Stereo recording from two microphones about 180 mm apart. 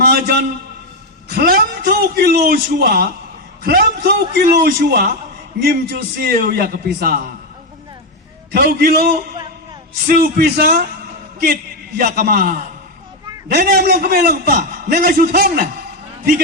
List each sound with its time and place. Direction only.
0.0 s a man's voice: 60° right (ahead or behind)
8.5 s a man's voice: 60° right (ahead or behind)
11.9 s a man's voice: 55° right (ahead or behind)
13.5 s a man's voice: 65° right (ahead or behind)